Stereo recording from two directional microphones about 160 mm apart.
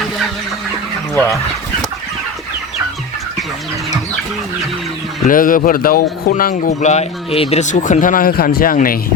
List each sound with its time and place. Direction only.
1.1 s speech: 15° left (ahead or behind)
5.3 s speech: 60° left (ahead or behind)
6.7 s speech: 45° left (ahead or behind)